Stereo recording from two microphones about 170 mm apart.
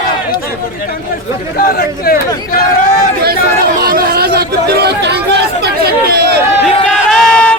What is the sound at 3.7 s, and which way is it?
Chatter, 60° right (ahead or behind).